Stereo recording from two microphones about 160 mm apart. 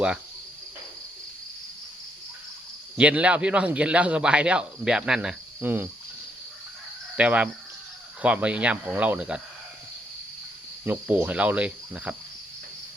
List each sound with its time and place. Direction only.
3.0 s speech: 10° right (ahead or behind)
7.2 s speech: 10° right (ahead or behind)
10.8 s speech: 10° right (ahead or behind)